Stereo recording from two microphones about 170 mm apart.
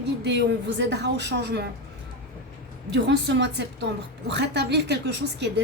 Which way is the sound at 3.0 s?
85° right.